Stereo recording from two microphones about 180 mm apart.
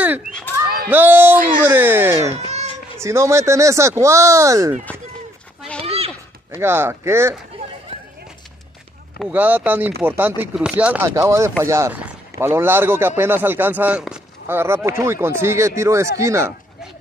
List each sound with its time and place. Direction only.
0.8 s a man's voice: 10° right (ahead or behind)
2.3 s cat: 35° right (ahead or behind)
3.0 s a man's voice: 15° right (ahead or behind)
5.8 s a sound: 35° right (ahead or behind)
6.5 s a man's voice: 15° right (ahead or behind)
9.3 s a man's voice: 10° right (ahead or behind)
11.1 s a man's voice: 20° right (ahead or behind)